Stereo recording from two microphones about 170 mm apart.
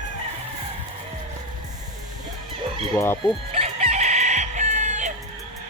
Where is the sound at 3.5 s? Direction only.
40° right (ahead or behind).